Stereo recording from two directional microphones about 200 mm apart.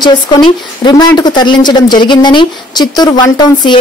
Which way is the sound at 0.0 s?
20° left (ahead or behind).